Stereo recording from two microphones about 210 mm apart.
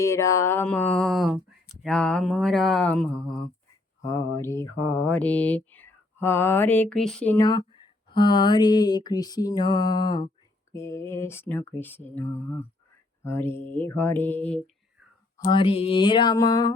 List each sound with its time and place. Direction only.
0.0 s mantra: 15° left (ahead or behind); by 1.4 s centre (ahead or behind)
1.8 s speech: 5° left (ahead or behind)
4.0 s mantra: 15° left (ahead or behind)
7.4 s speech: 20° left (ahead or behind)
10.7 s mantra: 10° left (ahead or behind)
15.4 s speech: 25° left (ahead or behind)